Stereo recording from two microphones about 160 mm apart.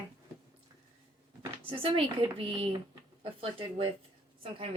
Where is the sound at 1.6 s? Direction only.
35° right (ahead or behind).